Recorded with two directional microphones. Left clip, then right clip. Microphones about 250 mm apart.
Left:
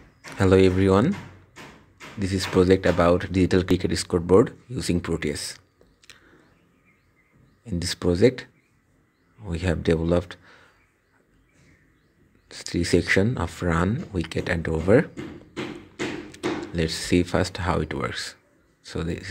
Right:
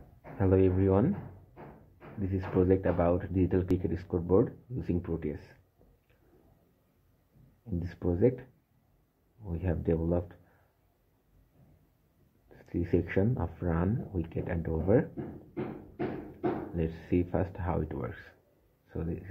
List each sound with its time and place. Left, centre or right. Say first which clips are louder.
0.4 s speech: left 8 dB; left
2.2 s speech: left 8 dB; left
6.1 s a sound: left 16 dB; left
7.6 s speech: left 10 dB; left
12.4 s speech: left 9 dB; left
16.7 s speech: left 8 dB; left